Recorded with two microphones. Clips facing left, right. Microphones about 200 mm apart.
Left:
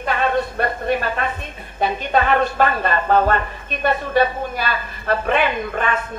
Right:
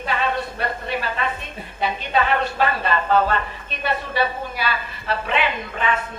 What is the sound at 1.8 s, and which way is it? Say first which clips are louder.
A woman's voice: left 3 dB; 50° left (ahead or behind).